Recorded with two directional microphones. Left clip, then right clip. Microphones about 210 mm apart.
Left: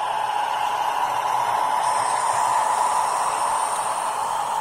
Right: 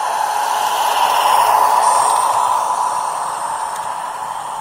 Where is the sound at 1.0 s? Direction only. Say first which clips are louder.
Right 9 dB; 50° right (ahead or behind).